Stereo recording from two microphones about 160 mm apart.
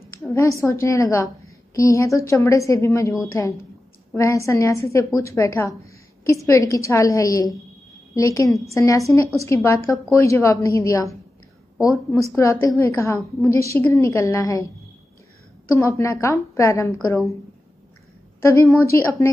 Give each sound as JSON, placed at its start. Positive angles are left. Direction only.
{"t": 0.3, "sound": "a woman's voice", "side_deg": 20}
{"t": 15.7, "sound": "a woman's voice", "side_deg": 20}
{"t": 18.4, "sound": "a woman's voice", "side_deg": 20}